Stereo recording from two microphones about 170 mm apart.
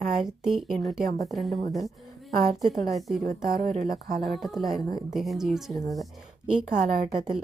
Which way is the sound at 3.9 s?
60° right (ahead or behind).